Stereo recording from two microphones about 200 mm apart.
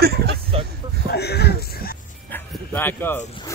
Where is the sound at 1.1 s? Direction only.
55° left (ahead or behind).